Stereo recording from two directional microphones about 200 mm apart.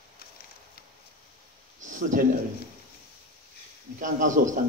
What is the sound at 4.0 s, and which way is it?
Speech, 40° right (ahead or behind).